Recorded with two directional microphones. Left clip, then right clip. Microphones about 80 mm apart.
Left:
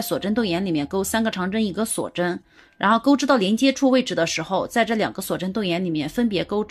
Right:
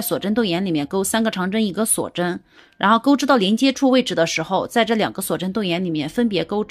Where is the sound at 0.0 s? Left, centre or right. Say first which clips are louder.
Right 2 dB; right.